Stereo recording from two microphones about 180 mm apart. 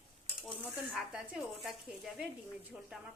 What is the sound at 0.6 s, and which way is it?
A woman's voice, 5° right (ahead or behind).